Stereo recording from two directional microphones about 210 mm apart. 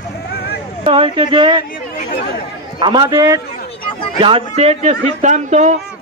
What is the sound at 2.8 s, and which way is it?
Speech, 20° right (ahead or behind).